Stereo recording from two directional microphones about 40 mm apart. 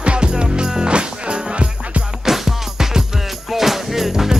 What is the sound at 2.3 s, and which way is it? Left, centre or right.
Music, centre.